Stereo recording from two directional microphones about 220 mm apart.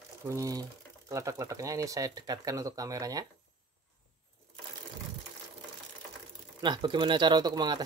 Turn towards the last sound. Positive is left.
turn(degrees=-20)  # may be behind; listen again after turning